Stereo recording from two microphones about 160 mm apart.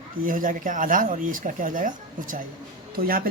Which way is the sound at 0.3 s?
55° right (ahead or behind).